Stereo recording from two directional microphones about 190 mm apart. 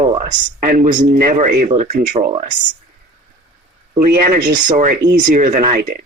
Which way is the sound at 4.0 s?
55° right (ahead or behind).